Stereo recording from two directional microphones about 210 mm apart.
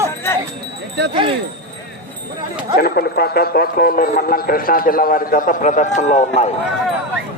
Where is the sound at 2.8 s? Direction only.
50° left (ahead or behind).